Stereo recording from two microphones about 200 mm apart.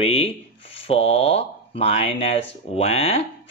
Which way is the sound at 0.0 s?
30° left (ahead or behind).